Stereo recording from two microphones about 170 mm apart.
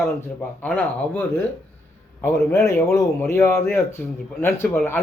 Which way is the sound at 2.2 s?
15° left (ahead or behind).